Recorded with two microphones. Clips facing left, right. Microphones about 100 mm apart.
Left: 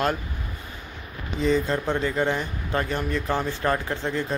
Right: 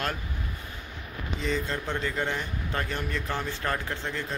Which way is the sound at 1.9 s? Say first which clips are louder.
Left 6 dB; 15° left (ahead or behind).